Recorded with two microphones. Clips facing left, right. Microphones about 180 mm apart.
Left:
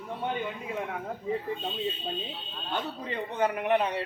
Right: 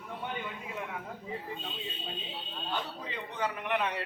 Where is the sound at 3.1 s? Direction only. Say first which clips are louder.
Left 7 dB; 50° left (ahead or behind).